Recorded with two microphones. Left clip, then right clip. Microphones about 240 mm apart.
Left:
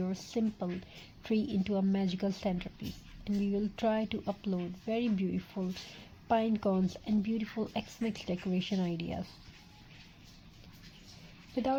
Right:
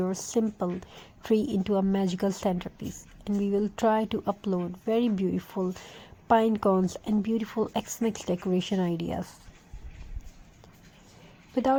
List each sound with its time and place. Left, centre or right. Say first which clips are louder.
0.0 s a woman's voice: right 8 dB; right
11.5 s a woman's voice: right 8 dB; right